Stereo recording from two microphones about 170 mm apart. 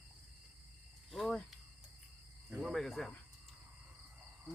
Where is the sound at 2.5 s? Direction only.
Centre (ahead or behind).